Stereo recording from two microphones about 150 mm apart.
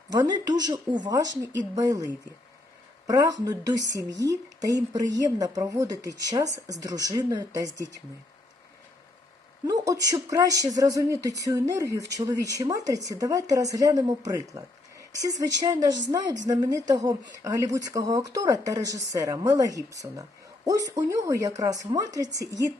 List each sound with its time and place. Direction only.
0.1 s a woman's voice: 25° right (ahead or behind)
3.1 s a woman's voice: 25° right (ahead or behind)
9.6 s a woman's voice: 25° right (ahead or behind)